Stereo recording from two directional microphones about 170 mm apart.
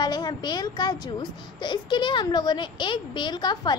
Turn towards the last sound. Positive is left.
turn(degrees=25)  # may be behind; listen again after turning